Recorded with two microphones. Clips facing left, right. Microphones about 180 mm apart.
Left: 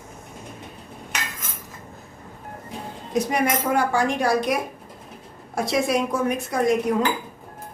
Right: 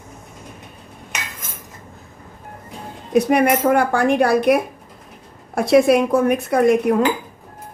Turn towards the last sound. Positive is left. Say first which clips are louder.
# right 6 dB
turn(degrees=-60)  # may be behind; listen again after turning